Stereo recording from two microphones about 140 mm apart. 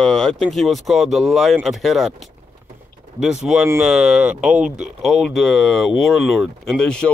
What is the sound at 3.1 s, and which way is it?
Speech, centre (ahead or behind).